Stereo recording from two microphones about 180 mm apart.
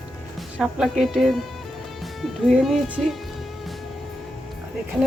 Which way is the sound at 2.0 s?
Centre (ahead or behind).